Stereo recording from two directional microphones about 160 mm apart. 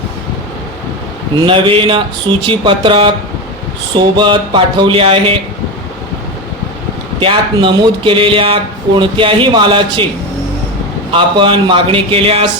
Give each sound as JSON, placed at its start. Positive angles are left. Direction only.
{"t": 1.4, "sound": "speech", "side_deg": -30}
{"t": 7.2, "sound": "speech", "side_deg": -30}
{"t": 11.1, "sound": "speech", "side_deg": -30}